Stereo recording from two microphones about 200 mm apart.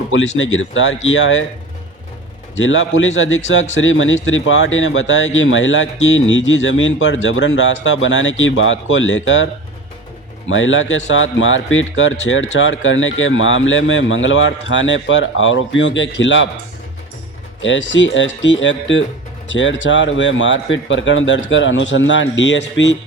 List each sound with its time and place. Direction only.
0.3 s speech: 75° left (ahead or behind)
2.6 s speech: 70° left (ahead or behind)
10.5 s speech: 75° left (ahead or behind)
17.6 s speech: 65° left (ahead or behind)